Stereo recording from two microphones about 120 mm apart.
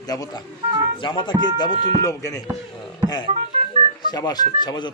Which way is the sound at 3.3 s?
60° right (ahead or behind).